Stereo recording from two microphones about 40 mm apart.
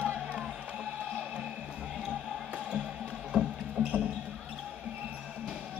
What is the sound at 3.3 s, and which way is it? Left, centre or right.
Music, right.